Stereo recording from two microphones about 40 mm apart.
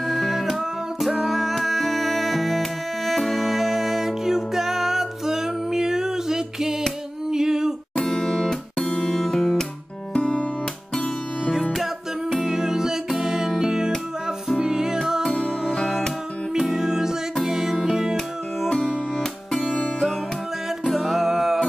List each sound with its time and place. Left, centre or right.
0.0 s music: centre
7.9 s music: left
9.2 s music: centre
10.1 s music: left
12.3 s music: centre
16.5 s music: centre
21.0 s music: centre